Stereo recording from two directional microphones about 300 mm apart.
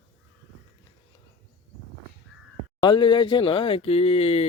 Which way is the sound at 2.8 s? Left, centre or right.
Centre.